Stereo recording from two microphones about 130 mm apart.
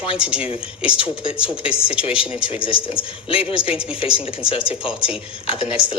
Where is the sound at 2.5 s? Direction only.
45° left (ahead or behind).